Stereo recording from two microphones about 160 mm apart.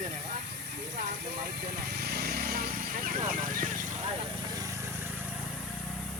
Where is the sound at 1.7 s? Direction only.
85° right; by 3.2 s 60° right (ahead or behind).